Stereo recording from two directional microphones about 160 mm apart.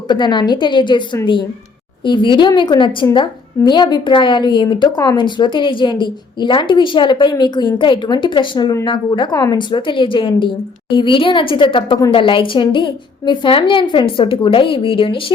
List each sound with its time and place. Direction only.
0.1 s a woman's voice: 30° left (ahead or behind)